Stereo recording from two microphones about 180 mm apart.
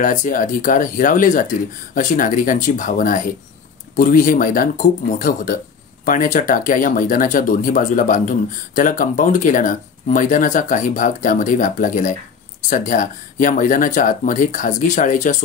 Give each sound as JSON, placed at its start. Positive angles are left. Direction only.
{"t": 0.0, "sound": "speech", "side_deg": 45}